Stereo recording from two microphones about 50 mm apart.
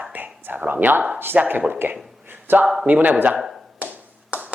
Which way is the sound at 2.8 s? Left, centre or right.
Right.